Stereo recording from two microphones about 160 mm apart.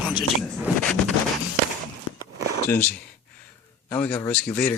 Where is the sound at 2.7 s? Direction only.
10° left (ahead or behind).